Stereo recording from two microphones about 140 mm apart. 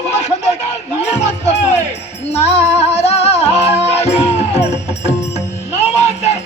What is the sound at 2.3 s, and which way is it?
Music, 50° left (ahead or behind).